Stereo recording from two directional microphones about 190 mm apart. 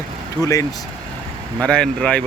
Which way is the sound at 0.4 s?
5° left (ahead or behind).